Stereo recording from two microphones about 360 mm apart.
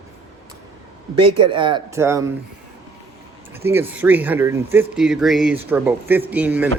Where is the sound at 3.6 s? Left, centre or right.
Centre.